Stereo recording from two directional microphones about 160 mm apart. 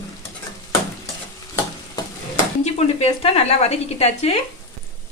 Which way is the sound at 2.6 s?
40° left (ahead or behind).